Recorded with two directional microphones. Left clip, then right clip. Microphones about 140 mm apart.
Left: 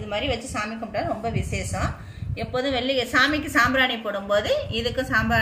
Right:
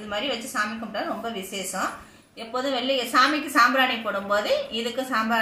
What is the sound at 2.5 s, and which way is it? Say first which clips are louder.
Speech: left 1 dB; 20° left (ahead or behind).